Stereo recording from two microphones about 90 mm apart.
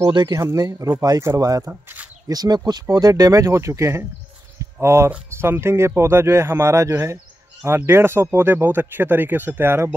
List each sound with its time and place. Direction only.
0.3 s speech: 35° right (ahead or behind)
1.6 s speech: 25° right (ahead or behind)
2.2 s speech: 45° right (ahead or behind); by 9.8 s 25° right (ahead or behind)